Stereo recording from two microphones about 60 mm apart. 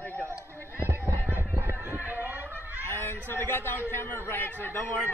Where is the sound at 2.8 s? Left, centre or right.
Left.